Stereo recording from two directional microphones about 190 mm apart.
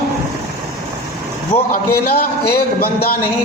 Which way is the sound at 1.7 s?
55° left (ahead or behind).